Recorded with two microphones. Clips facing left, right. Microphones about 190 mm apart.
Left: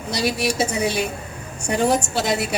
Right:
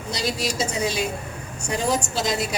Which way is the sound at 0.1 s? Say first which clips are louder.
Left 4 dB; 60° left (ahead or behind).